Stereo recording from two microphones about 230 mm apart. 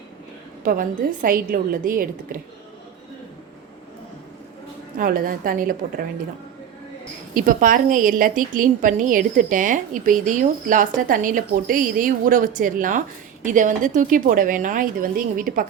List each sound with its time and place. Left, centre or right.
0.6 s a woman's voice: right
4.9 s a woman's voice: right
7.3 s a woman's voice: right